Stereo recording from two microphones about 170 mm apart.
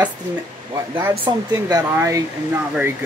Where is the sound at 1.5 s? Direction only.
20° right (ahead or behind).